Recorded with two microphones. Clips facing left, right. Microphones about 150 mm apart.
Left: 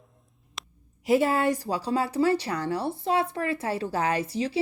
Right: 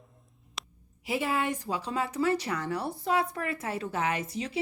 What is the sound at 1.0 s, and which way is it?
Speech, 40° left (ahead or behind).